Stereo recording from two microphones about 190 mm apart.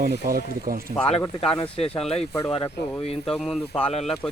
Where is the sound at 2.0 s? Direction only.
35° left (ahead or behind).